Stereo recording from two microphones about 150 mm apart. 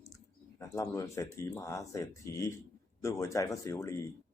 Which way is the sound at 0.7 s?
20° left (ahead or behind).